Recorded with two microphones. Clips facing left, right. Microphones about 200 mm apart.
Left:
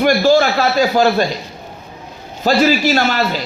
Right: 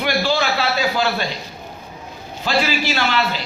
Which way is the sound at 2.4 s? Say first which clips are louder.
Left 7 dB; 40° left (ahead or behind).